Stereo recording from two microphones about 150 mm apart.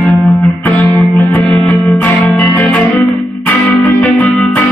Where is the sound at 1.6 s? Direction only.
Centre (ahead or behind).